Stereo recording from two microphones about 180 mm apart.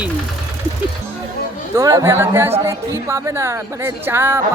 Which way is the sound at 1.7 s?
20° right (ahead or behind).